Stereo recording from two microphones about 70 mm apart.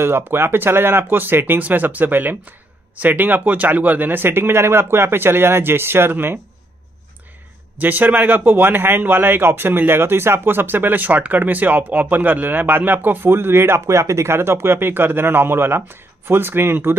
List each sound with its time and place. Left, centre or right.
0.0 s speech: right
7.8 s speech: right